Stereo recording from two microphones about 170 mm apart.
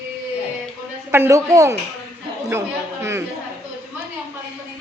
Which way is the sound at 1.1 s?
15° right (ahead or behind).